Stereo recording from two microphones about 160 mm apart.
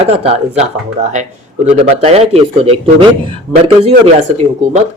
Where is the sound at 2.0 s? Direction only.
40° right (ahead or behind).